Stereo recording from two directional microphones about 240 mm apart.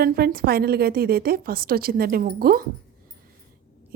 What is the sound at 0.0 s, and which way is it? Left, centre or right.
A woman's voice, right.